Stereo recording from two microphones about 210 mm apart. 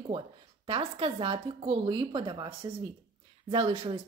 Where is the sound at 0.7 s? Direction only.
25° right (ahead or behind).